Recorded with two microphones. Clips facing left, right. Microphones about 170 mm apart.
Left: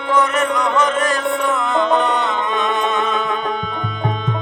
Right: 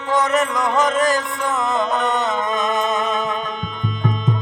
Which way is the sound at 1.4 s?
40° right (ahead or behind).